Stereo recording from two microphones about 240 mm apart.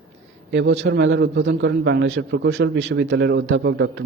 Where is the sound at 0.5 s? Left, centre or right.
Right.